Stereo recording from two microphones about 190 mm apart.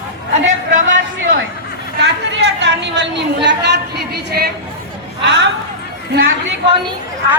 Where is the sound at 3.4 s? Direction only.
60° right (ahead or behind).